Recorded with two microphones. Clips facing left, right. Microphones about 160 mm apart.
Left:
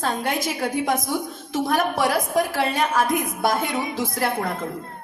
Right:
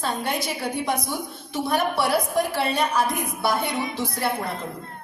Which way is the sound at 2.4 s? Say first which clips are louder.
Left 1 dB; 45° left (ahead or behind).